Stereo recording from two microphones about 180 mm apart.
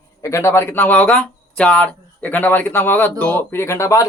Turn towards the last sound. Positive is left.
turn(degrees=15)  # may be behind; listen again after turning